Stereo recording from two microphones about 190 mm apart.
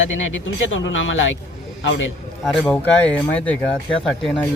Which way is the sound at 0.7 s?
80° left.